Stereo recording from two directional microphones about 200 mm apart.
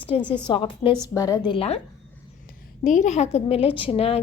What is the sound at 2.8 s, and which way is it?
A woman's voice, 35° left (ahead or behind).